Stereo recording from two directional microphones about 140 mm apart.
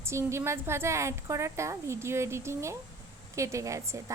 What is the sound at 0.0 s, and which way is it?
A woman's voice, 20° right (ahead or behind).